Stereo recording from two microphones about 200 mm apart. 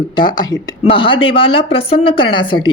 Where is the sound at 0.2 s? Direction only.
25° left (ahead or behind).